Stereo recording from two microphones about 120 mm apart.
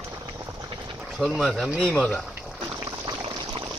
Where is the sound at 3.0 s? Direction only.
40° right (ahead or behind).